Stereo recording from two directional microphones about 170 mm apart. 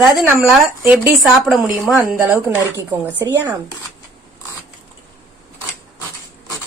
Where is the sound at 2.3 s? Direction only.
15° right (ahead or behind).